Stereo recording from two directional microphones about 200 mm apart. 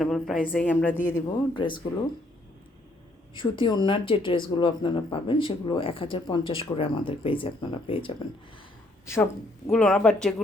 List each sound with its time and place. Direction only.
0.0 s a woman's voice: centre (ahead or behind)
1.5 s speech: 25° left (ahead or behind)
3.3 s speech: 25° left (ahead or behind)
9.0 s a woman's voice: 15° left (ahead or behind)